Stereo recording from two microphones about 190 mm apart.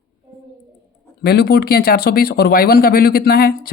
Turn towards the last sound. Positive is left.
turn(degrees=50)  # may be behind; listen again after turning